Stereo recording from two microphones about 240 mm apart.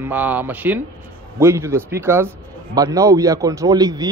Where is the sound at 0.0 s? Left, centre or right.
Centre.